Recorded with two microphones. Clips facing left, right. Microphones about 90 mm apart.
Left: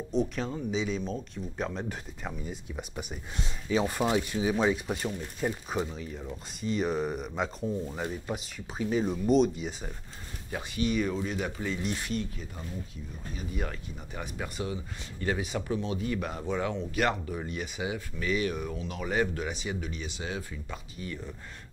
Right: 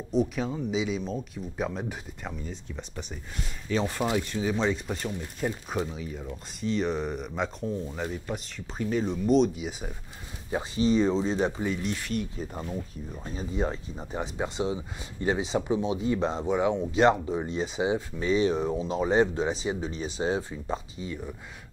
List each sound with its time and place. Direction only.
0.1 s speech: 5° right (ahead or behind)
2.4 s speech: 10° left (ahead or behind)
10.5 s speech: 25° right (ahead or behind)
13.4 s speech: 25° right (ahead or behind)